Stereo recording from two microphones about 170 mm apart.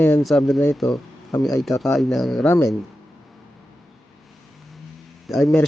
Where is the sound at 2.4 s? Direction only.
15° left (ahead or behind).